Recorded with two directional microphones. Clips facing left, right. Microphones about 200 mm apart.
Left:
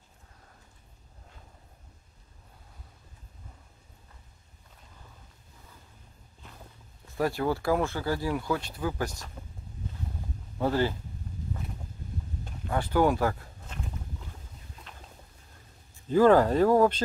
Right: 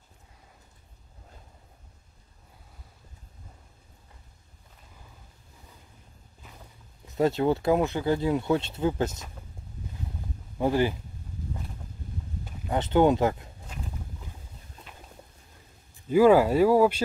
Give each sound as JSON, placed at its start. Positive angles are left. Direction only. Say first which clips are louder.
{"t": 7.1, "sound": "speech", "louder": "right 4 dB", "side_deg": -20}
{"t": 10.6, "sound": "speech", "louder": "right 2 dB", "side_deg": -15}
{"t": 12.6, "sound": "speech", "louder": "right 3 dB", "side_deg": -20}
{"t": 14.9, "sound": "a sound", "louder": "right 2 dB", "side_deg": -10}
{"t": 16.1, "sound": "speech", "louder": "right 2 dB", "side_deg": -10}